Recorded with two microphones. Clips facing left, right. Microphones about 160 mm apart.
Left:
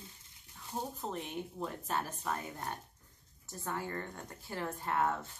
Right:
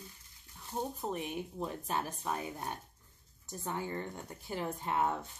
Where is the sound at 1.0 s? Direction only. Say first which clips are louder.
Right 2 dB; 15° right (ahead or behind).